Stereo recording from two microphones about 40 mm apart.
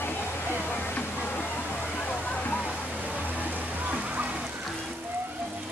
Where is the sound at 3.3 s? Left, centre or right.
Right.